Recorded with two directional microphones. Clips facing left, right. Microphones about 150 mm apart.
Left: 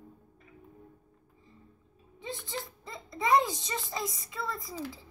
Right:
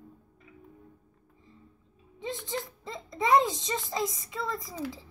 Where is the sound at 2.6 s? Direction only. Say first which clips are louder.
Right 3 dB; 20° right (ahead or behind).